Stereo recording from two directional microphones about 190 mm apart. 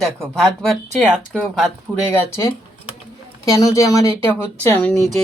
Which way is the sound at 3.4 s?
15° left (ahead or behind).